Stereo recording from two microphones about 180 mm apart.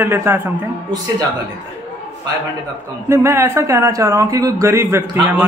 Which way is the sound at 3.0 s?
15° right (ahead or behind).